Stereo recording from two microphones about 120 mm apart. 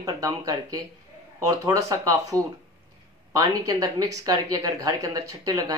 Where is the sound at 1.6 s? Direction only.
30° right (ahead or behind).